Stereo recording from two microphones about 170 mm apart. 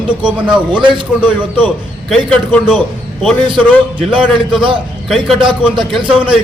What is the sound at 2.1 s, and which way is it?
Speech, 5° left (ahead or behind).